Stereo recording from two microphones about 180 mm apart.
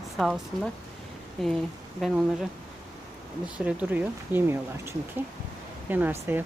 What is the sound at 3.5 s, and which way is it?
Speech, 5° right (ahead or behind).